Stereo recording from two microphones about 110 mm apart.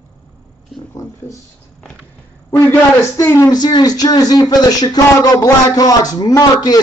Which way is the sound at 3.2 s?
30° left (ahead or behind).